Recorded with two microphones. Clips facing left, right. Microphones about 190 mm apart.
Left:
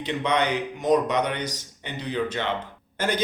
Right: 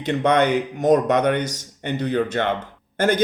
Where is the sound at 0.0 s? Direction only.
45° right (ahead or behind).